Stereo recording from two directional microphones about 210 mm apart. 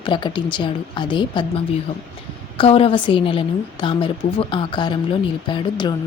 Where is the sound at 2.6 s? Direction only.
25° left (ahead or behind).